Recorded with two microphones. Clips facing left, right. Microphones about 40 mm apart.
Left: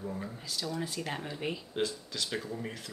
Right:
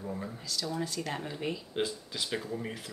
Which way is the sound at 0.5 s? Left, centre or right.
Centre.